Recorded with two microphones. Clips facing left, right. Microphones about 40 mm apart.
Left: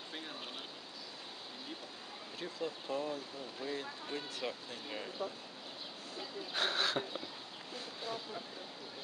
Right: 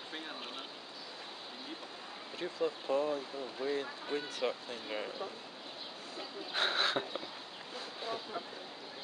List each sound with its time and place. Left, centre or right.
2.4 s speech: centre
6.1 s speech: centre